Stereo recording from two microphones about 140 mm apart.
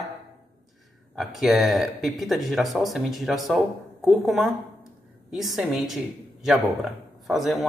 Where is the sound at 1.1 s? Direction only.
Centre (ahead or behind).